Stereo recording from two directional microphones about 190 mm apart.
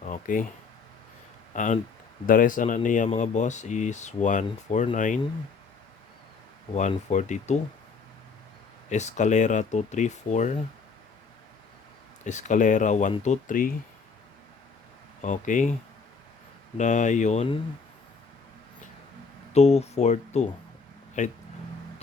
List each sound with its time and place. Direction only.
0.0 s speech: 45° left (ahead or behind)
1.5 s speech: 40° left (ahead or behind)
7.1 s speech: 40° left (ahead or behind)
8.9 s speech: 40° left (ahead or behind)
12.2 s speech: 40° left (ahead or behind)
15.2 s speech: 40° left (ahead or behind)
16.7 s speech: 40° left (ahead or behind)
19.5 s speech: 35° left (ahead or behind)